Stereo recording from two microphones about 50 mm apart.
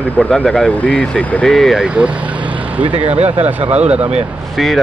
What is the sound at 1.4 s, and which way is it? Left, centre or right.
Speech, centre.